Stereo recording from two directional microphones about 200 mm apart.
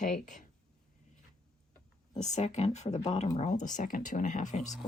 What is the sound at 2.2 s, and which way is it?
Speech, 35° left (ahead or behind).